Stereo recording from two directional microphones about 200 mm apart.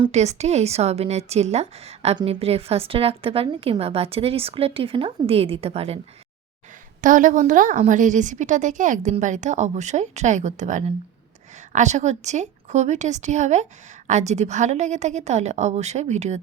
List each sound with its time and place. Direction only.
0.0 s a woman's voice: 35° right (ahead or behind)
7.0 s a woman's voice: 40° right (ahead or behind)